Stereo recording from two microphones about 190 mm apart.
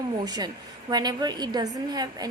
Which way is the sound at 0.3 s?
20° right (ahead or behind).